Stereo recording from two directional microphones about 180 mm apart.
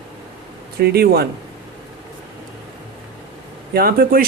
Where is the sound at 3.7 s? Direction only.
55° right (ahead or behind).